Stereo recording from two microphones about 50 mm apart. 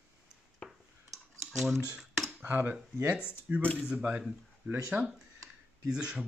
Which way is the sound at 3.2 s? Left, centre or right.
Right.